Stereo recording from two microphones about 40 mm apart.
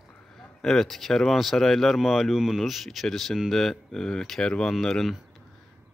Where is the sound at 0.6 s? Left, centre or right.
Centre.